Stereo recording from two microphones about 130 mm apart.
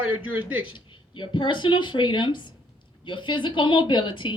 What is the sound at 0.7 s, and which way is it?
A woman's voice, 40° left (ahead or behind).